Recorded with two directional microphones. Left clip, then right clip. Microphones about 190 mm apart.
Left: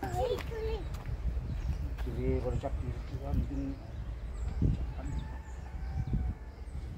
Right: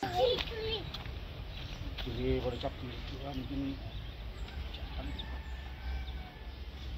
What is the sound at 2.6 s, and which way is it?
Speech, 10° right (ahead or behind).